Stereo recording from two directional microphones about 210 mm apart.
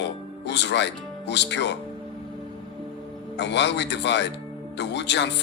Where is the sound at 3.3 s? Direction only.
55° left (ahead or behind).